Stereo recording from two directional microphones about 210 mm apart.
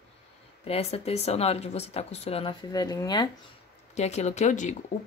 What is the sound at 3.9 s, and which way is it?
Speech, 30° left (ahead or behind).